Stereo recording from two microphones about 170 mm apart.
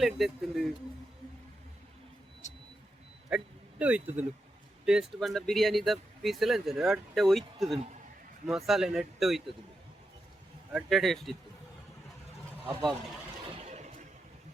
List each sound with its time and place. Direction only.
0.0 s speech: centre (ahead or behind)
2.4 s music: 45° left (ahead or behind)
3.2 s speech: 5° right (ahead or behind)
10.8 s speech: centre (ahead or behind)
13.6 s a sound: 40° right (ahead or behind)